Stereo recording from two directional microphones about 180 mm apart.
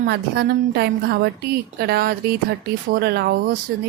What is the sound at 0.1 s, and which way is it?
Speech, 65° right (ahead or behind).